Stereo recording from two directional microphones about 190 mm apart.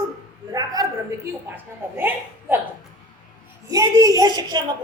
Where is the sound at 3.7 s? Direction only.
15° right (ahead or behind).